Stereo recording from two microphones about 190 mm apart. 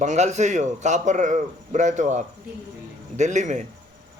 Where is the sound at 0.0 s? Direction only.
40° right (ahead or behind).